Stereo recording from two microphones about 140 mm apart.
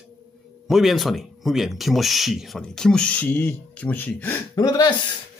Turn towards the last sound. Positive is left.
turn(degrees=25)  # may be behind; listen again after turning